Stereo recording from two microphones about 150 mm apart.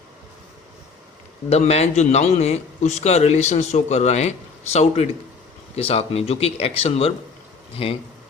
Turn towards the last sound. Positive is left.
turn(degrees=40)  # may be behind; listen again after turning